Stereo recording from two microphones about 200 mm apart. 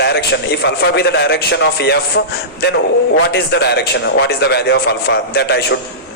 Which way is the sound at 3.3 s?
55° left (ahead or behind).